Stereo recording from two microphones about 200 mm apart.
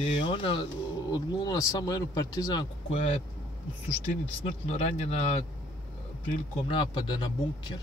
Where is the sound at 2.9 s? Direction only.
30° left (ahead or behind).